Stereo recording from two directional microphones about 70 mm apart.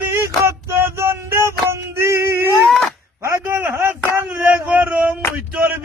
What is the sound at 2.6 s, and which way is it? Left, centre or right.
Speech, centre.